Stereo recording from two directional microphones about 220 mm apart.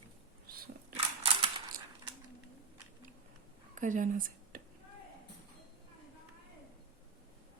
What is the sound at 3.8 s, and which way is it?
Speech, 35° right (ahead or behind).